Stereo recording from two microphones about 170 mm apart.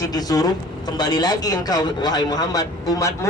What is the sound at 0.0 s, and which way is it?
A man's voice, 20° left (ahead or behind).